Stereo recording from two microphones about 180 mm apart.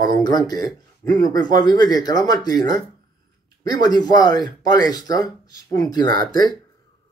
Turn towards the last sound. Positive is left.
turn(degrees=20)  # may be behind; listen again after turning